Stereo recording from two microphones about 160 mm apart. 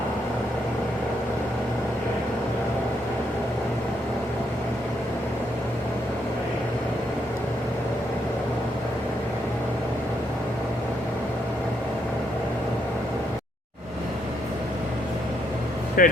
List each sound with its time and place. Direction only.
16.0 s vehicle: 60° left (ahead or behind)